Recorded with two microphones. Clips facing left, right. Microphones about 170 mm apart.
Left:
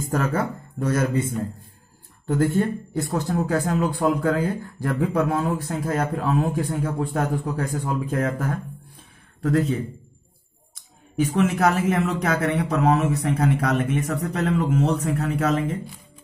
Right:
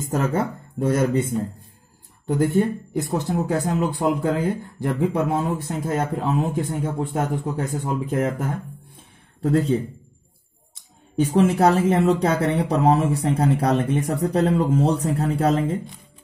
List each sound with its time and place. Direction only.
0.0 s speech: 20° right (ahead or behind)
2.2 s speech: 15° right (ahead or behind)